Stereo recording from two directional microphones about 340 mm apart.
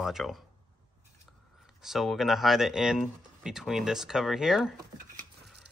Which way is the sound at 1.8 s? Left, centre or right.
Centre.